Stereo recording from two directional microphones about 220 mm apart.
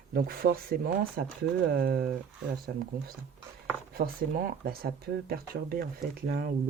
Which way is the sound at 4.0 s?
40° right (ahead or behind).